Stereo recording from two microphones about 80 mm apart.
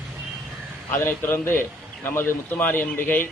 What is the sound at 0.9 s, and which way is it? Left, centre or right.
A man's voice, left.